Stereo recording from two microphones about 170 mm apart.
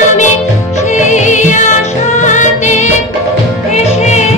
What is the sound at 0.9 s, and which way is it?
Music, 45° left (ahead or behind).